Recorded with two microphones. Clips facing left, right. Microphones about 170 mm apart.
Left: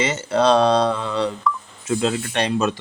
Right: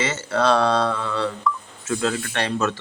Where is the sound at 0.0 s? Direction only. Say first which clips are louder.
Left 3 dB; 15° left (ahead or behind).